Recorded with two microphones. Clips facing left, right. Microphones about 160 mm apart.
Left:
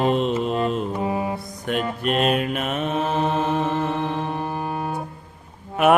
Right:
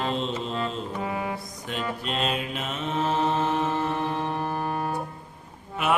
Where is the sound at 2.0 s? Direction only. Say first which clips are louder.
Left 10 dB; 60° left (ahead or behind).